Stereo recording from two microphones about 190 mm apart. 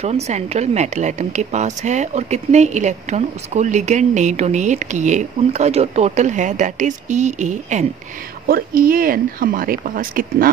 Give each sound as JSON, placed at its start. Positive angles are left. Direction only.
{"t": 0.0, "sound": "speech", "side_deg": -35}
{"t": 8.5, "sound": "speech", "side_deg": -50}